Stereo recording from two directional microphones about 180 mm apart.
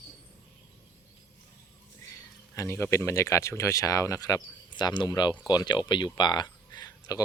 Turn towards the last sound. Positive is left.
turn(degrees=20)  # may be behind; listen again after turning